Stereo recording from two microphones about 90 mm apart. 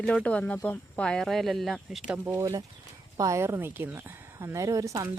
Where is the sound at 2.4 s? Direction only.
40° right (ahead or behind).